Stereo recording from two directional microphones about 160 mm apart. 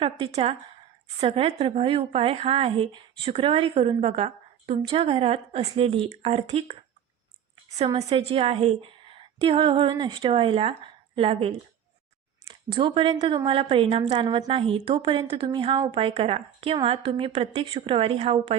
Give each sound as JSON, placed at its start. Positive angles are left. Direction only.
{"t": 0.0, "sound": "a woman's voice", "side_deg": -40}
{"t": 7.9, "sound": "a woman's voice", "side_deg": -40}